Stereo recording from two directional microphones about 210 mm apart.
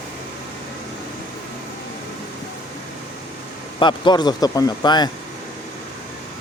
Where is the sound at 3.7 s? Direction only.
20° left (ahead or behind).